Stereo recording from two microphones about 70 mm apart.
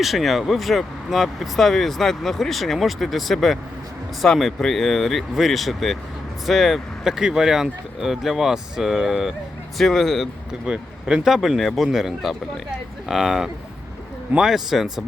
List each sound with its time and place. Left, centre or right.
0.0 s speech: centre
9.7 s speech: centre
10.7 s speech: centre